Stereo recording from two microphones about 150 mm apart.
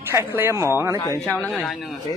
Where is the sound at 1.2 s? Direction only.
Centre (ahead or behind).